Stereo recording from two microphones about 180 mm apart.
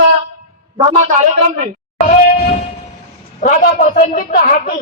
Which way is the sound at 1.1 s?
40° right (ahead or behind).